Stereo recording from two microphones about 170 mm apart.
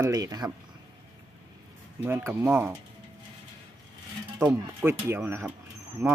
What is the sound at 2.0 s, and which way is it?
Speech, 15° right (ahead or behind).